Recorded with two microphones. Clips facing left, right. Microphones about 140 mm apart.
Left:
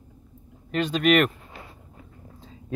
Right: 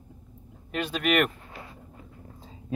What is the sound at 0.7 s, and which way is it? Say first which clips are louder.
Speech: left 6 dB; 10° right (ahead or behind).